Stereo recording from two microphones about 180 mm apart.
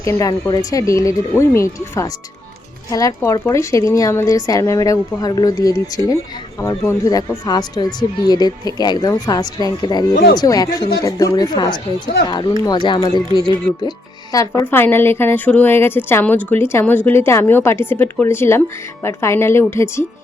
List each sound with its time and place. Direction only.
0.0 s a woman's voice: 15° left (ahead or behind)